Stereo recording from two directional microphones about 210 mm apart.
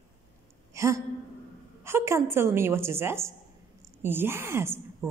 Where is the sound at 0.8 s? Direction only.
15° right (ahead or behind).